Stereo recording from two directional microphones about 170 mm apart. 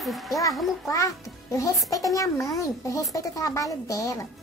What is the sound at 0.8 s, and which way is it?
A child's voice, 20° left (ahead or behind).